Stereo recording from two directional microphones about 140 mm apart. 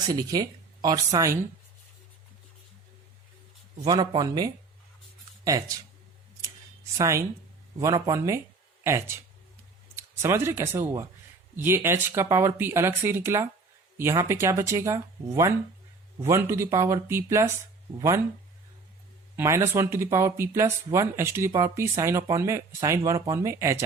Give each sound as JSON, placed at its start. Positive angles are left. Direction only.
{"t": 0.1, "sound": "speech", "side_deg": -25}
{"t": 3.8, "sound": "speech", "side_deg": -30}
{"t": 6.9, "sound": "speech", "side_deg": -20}
{"t": 19.4, "sound": "speech", "side_deg": -20}